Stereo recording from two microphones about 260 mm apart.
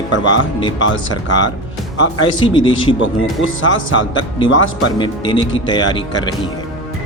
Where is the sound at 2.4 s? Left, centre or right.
Centre.